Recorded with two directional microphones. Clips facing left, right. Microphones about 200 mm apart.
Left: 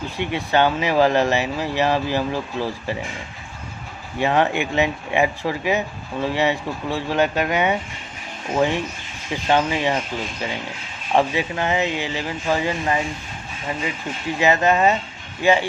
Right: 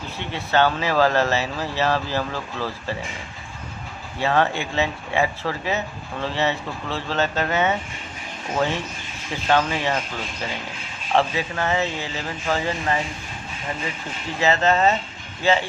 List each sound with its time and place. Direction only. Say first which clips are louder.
0.2 s speech: left 1 dB; 15° left (ahead or behind)
4.2 s speech: left 2 dB; 15° left (ahead or behind)
11.1 s speech: left 2 dB; 15° left (ahead or behind)
14.3 s speech: left 2 dB; 15° left (ahead or behind)